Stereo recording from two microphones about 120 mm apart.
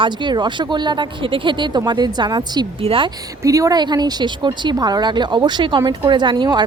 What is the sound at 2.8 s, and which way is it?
Speech, 50° right (ahead or behind).